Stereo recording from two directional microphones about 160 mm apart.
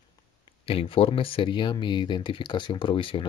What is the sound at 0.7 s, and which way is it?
Speech, 35° left (ahead or behind).